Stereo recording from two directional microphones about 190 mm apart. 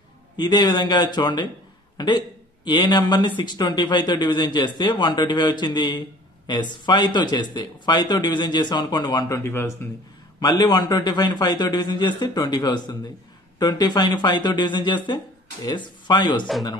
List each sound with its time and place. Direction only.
0.4 s speech: 20° left (ahead or behind)
10.4 s speech: 20° left (ahead or behind)